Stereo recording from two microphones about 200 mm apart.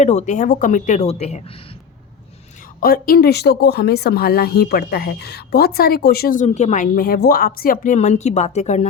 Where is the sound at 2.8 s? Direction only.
45° left (ahead or behind).